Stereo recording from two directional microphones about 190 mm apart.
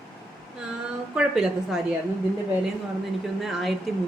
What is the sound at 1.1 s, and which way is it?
Speech, 5° right (ahead or behind).